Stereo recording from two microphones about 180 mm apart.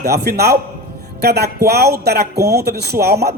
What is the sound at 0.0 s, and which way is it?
Speech, 65° right (ahead or behind).